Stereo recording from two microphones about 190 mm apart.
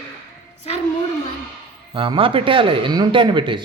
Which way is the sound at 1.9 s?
25° right (ahead or behind).